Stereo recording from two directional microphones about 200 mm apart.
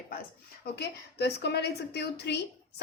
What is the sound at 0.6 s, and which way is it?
A woman's voice, 55° left (ahead or behind).